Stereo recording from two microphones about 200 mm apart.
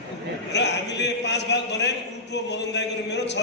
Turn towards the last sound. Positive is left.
turn(degrees=60)  # may be behind; listen again after turning